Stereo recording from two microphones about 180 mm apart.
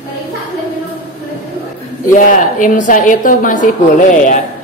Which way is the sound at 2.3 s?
45° left (ahead or behind).